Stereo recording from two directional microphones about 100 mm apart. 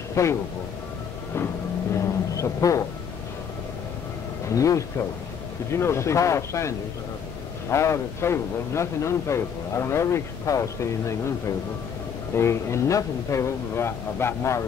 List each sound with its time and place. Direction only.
0.1 s speech: 30° left (ahead or behind)
2.0 s a sound: 30° left (ahead or behind)
4.5 s a man's voice: 30° left (ahead or behind)
7.7 s a man's voice: 30° left (ahead or behind)